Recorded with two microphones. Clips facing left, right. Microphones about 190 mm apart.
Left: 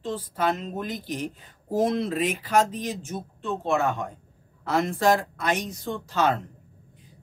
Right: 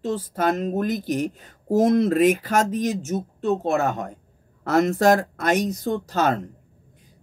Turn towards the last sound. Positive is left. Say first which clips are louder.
# right 3 dB
turn(degrees=-40)  # may be behind; listen again after turning